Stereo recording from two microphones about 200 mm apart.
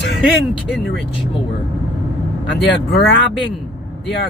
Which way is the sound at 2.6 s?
60° left (ahead or behind).